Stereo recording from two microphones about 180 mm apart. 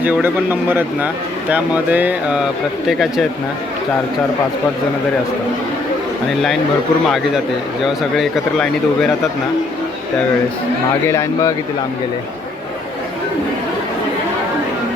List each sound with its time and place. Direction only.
0.0 s a man's voice: 10° right (ahead or behind)
7.9 s speech: centre (ahead or behind)
11.0 s speech: 15° left (ahead or behind)